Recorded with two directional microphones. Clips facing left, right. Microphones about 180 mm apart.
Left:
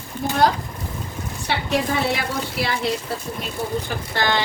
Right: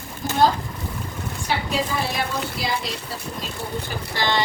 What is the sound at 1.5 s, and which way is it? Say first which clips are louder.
Speech: left 3 dB; 70° left (ahead or behind).